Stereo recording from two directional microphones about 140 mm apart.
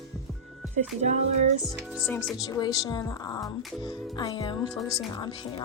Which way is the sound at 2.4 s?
30° left (ahead or behind).